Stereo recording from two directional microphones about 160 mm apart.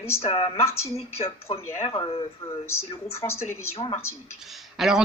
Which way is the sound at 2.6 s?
15° left (ahead or behind).